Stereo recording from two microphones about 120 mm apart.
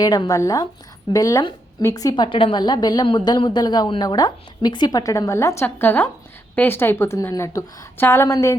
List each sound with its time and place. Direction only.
0.0 s a woman's voice: 35° left (ahead or behind)